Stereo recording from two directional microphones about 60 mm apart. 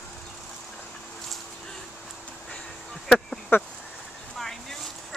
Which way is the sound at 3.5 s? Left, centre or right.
Left.